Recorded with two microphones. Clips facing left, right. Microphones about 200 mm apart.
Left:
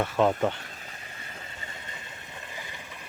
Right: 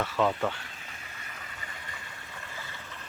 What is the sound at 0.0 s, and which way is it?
Speech, 20° left (ahead or behind).